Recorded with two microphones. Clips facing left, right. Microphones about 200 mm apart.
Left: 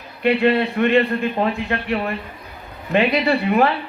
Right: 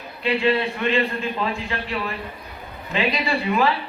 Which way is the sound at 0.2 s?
60° left (ahead or behind).